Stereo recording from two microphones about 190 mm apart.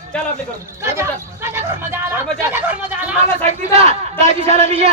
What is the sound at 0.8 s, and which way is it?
Chatter, 15° right (ahead or behind).